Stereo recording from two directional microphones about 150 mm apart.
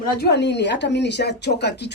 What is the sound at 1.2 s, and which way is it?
Speech, 90° left.